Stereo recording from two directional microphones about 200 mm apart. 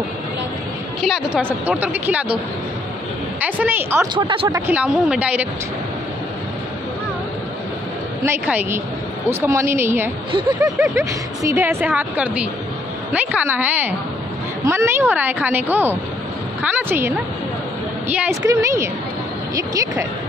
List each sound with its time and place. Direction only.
1.0 s a woman's voice: centre (ahead or behind)
3.4 s speech: 10° right (ahead or behind)
4.1 s speech: 25° right (ahead or behind); by 5.5 s 5° right (ahead or behind)
8.2 s a woman's voice: 10° right (ahead or behind)